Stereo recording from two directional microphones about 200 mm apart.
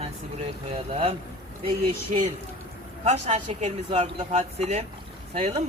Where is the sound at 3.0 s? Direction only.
35° right (ahead or behind).